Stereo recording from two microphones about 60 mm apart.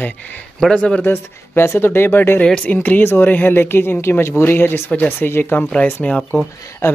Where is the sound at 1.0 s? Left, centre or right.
Left.